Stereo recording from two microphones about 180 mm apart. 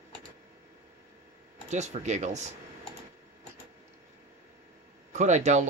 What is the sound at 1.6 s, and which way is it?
Speech, 40° right (ahead or behind).